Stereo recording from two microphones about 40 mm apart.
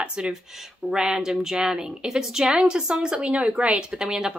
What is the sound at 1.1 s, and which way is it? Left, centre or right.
A woman's voice, centre.